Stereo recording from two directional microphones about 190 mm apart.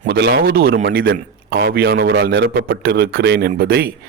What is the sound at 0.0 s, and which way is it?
A man's voice, 60° right (ahead or behind).